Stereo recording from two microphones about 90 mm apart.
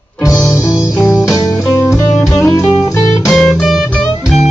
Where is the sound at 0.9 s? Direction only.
Centre (ahead or behind).